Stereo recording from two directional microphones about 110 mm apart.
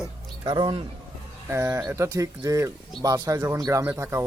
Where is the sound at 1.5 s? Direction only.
25° right (ahead or behind).